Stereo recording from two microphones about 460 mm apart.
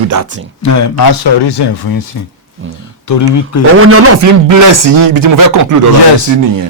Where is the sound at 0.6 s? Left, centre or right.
Left.